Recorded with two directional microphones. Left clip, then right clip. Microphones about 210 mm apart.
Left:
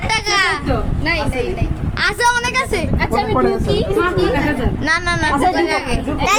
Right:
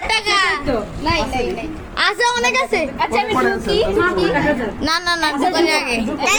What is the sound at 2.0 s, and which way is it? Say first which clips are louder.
A child's voice: even; 10° left (ahead or behind).